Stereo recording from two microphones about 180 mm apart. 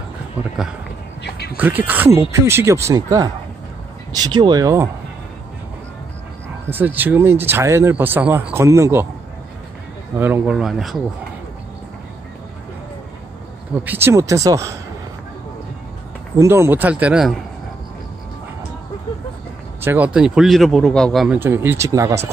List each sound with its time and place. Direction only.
1.6 s speech: 10° right (ahead or behind)
6.7 s speech: 10° right (ahead or behind)
10.1 s speech: 10° right (ahead or behind)
13.8 s speech: 15° right (ahead or behind)
16.3 s speech: 15° right (ahead or behind)
19.8 s speech: 10° right (ahead or behind)
21.4 s speech: 10° right (ahead or behind)